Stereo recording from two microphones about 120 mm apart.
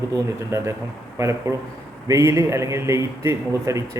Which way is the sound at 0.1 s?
25° right (ahead or behind).